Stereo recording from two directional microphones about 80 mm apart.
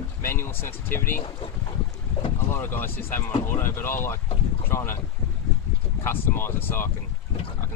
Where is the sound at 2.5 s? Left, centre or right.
Left.